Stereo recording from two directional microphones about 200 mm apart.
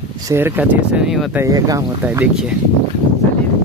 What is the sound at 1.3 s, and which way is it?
Speech, 15° right (ahead or behind).